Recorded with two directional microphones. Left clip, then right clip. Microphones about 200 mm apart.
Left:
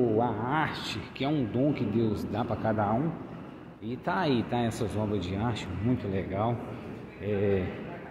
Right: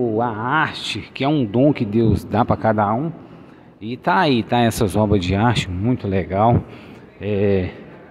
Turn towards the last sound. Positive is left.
turn(degrees=-45)  # may be behind; listen again after turning